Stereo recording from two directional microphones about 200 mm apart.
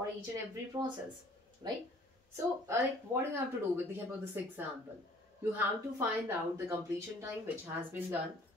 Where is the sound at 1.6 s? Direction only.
20° right (ahead or behind).